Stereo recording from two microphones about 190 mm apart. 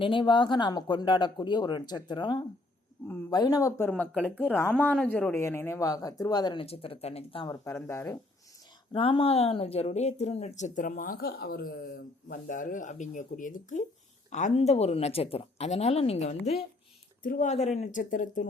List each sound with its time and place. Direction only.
0.0 s speech: 25° left (ahead or behind)
7.4 s speech: 15° left (ahead or behind)
8.9 s speech: 30° left (ahead or behind); by 18.4 s 45° left (ahead or behind)